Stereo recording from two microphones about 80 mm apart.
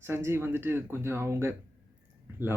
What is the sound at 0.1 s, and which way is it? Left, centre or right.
Speech, right.